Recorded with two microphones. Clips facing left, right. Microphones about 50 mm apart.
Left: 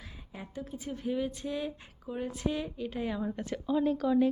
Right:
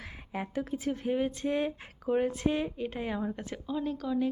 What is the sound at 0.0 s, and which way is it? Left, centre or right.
A woman's voice, right.